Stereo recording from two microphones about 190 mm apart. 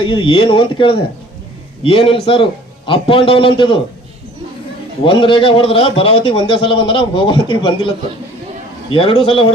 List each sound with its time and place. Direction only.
0.0 s a man's voice: 25° left (ahead or behind)
5.0 s a man's voice: 25° left (ahead or behind)